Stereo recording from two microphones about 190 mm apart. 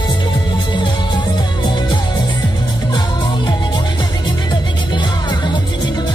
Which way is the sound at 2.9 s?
25° left (ahead or behind).